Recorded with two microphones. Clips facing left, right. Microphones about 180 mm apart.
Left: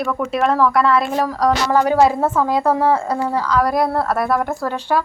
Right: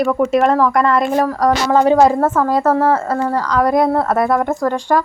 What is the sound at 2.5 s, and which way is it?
A woman's voice, 10° left (ahead or behind).